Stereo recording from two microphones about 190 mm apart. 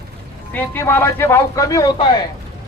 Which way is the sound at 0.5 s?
10° left (ahead or behind).